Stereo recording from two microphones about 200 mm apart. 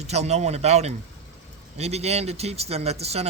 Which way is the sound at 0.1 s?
35° right (ahead or behind).